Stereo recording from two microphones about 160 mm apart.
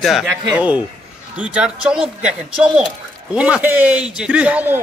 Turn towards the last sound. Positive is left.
turn(degrees=-10)  # may be behind; listen again after turning